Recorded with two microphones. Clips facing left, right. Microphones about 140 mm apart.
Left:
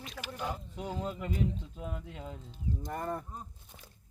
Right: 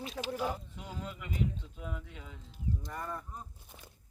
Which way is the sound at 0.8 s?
40° left (ahead or behind).